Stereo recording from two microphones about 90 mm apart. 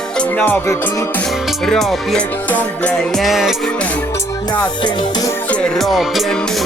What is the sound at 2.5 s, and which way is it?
Music, 20° left (ahead or behind).